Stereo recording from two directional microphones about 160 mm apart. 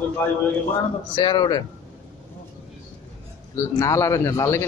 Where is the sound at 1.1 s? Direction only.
30° left (ahead or behind).